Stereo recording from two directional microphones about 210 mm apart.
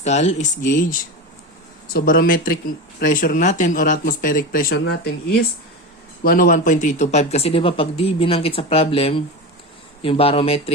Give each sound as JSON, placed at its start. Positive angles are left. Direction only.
{"t": 0.0, "sound": "speech", "side_deg": 35}
{"t": 6.2, "sound": "speech", "side_deg": 40}